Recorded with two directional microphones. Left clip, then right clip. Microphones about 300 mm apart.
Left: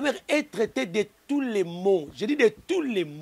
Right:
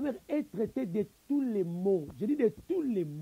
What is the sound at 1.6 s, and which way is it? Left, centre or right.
Speech, left.